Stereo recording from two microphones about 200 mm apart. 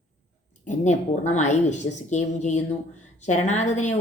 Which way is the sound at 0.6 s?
35° left (ahead or behind).